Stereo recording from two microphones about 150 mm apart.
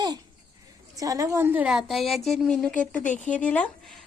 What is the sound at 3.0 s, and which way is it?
Speech, 55° left (ahead or behind).